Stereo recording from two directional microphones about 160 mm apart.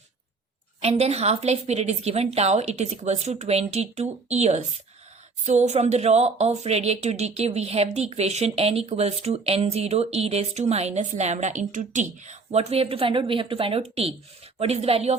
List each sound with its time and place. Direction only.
0.8 s a woman's voice: 40° right (ahead or behind)